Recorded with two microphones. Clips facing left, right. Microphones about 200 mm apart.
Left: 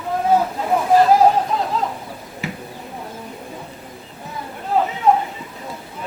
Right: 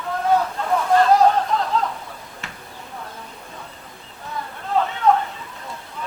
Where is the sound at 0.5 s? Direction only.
15° left (ahead or behind).